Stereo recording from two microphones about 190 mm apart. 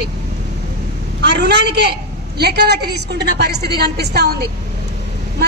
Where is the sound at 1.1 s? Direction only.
60° right (ahead or behind).